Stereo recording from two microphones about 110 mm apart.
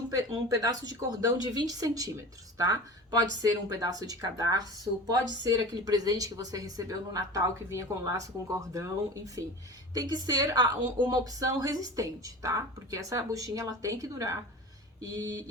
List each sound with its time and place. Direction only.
0.1 s speech: 35° right (ahead or behind)